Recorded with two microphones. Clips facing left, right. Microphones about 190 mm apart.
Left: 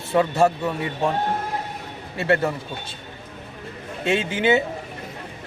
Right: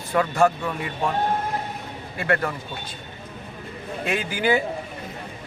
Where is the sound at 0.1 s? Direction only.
25° left (ahead or behind).